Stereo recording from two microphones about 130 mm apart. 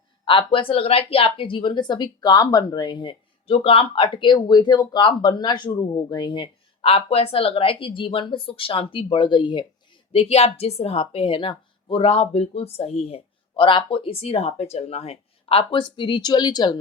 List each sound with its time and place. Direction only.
0.3 s a woman's voice: 40° left (ahead or behind)